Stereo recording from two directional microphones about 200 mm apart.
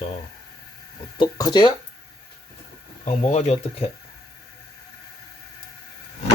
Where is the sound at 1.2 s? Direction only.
20° left (ahead or behind).